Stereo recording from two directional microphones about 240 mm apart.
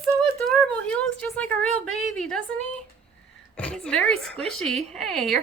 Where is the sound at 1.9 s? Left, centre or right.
Left.